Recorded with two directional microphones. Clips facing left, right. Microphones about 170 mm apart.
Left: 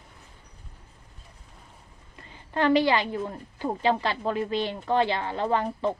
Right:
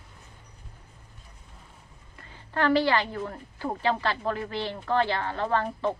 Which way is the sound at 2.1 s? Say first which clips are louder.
Left 1 dB; 20° left (ahead or behind).